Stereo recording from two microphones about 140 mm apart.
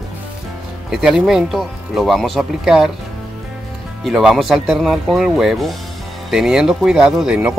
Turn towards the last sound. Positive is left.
turn(degrees=-5)  # may be behind; listen again after turning